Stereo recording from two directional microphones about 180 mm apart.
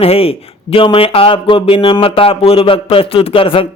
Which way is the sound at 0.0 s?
35° left (ahead or behind).